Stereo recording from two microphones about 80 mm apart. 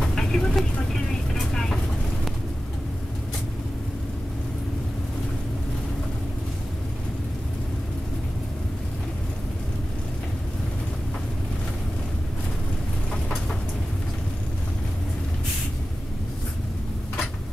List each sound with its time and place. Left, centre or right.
0.0 s vehicle: centre